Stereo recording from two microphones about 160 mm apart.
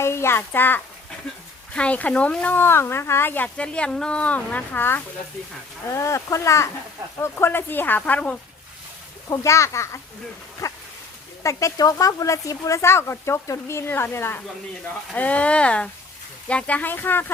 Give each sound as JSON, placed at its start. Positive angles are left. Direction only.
{"t": 0.0, "sound": "a child's voice", "side_deg": 15}
{"t": 10.6, "sound": "a sound", "side_deg": 20}
{"t": 11.4, "sound": "speech", "side_deg": 20}